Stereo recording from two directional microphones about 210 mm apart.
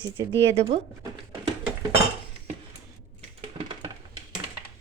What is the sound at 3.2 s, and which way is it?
Crushing, 30° right (ahead or behind).